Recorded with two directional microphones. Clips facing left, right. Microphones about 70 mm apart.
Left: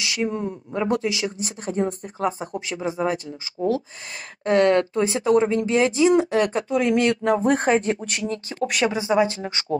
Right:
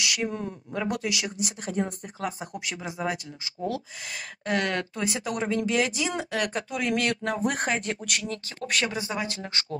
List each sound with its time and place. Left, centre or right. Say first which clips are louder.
0.0 s speech: left 4 dB; left
8.6 s speech: left 6 dB; centre
8.9 s speech: left 11 dB; left